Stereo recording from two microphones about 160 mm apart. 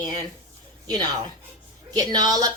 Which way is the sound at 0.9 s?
25° right (ahead or behind).